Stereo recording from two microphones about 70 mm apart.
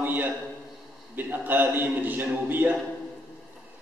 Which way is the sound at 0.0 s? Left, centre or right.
Right.